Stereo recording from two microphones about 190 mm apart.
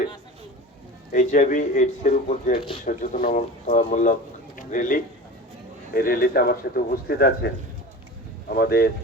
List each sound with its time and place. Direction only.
1.1 s speech: 45° left (ahead or behind)
4.5 s a sound: 45° left (ahead or behind)
5.9 s speech: 50° left (ahead or behind)